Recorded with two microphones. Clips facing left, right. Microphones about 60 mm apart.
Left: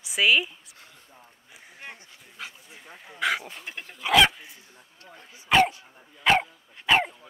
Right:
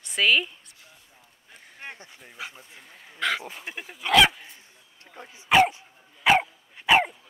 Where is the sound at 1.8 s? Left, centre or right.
Right.